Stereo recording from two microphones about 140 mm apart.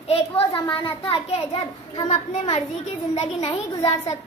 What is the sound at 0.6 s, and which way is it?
A child's voice, 40° left (ahead or behind).